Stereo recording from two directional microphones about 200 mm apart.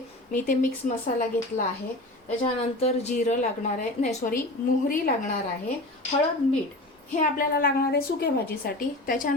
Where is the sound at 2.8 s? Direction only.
35° left (ahead or behind).